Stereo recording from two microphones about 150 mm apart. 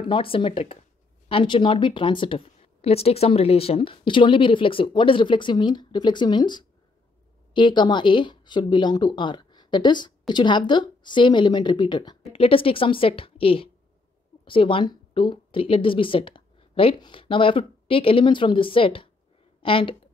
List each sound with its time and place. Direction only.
0.0 s speech: 35° left (ahead or behind)